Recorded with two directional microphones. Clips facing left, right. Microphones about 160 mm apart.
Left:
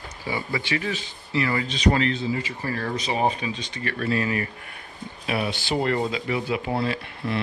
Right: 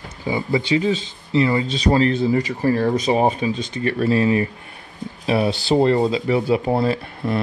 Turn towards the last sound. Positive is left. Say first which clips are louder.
# right 6 dB
turn(degrees=-40)  # may be behind; listen again after turning